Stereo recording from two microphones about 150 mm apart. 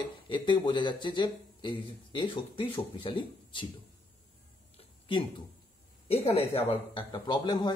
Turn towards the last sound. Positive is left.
turn(degrees=30)  # may be behind; listen again after turning